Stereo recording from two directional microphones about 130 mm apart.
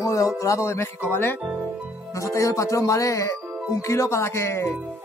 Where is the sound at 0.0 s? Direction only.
25° left (ahead or behind).